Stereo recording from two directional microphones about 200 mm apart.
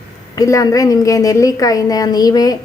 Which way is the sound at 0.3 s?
15° left (ahead or behind).